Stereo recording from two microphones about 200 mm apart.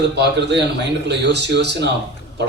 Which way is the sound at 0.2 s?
60° right (ahead or behind).